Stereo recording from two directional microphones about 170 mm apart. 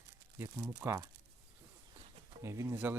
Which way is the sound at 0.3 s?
15° right (ahead or behind).